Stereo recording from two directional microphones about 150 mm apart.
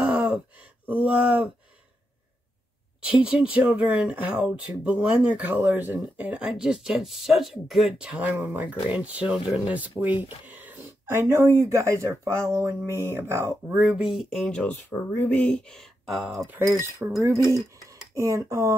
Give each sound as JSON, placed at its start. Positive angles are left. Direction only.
{"t": 0.0, "sound": "a sound", "side_deg": -5}
{"t": 1.0, "sound": "speech", "side_deg": -5}
{"t": 3.1, "sound": "speech", "side_deg": -5}
{"t": 16.4, "sound": "speech", "side_deg": -15}